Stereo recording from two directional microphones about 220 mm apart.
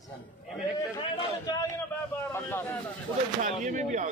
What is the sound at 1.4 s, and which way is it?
Speech, 20° left (ahead or behind).